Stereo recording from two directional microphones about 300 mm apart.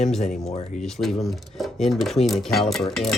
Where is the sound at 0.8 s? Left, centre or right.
Centre.